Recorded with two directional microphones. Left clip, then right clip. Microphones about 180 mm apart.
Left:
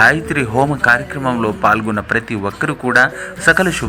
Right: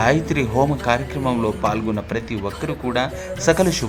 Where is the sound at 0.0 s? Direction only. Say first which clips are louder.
Left 6 dB; 5° left (ahead or behind).